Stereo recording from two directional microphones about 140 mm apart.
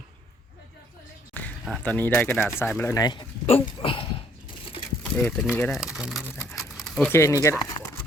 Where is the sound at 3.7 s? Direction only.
40° left (ahead or behind).